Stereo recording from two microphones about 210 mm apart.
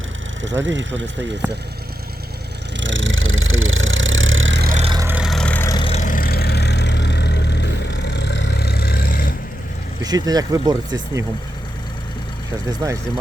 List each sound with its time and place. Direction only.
0.4 s speech: 60° right (ahead or behind)
2.8 s vehicle: 65° right (ahead or behind)
4.6 s vehicle: 35° right (ahead or behind)
4.9 s vehicle: 15° right (ahead or behind); by 5.7 s 5° left (ahead or behind)
5.7 s vehicle: 25° left (ahead or behind); by 9.3 s 45° left (ahead or behind)
10.0 s speech: 20° right (ahead or behind)
12.6 s speech: 15° right (ahead or behind)